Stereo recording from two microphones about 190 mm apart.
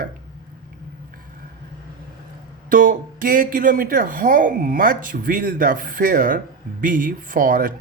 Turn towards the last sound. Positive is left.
turn(degrees=-45)  # may be behind; listen again after turning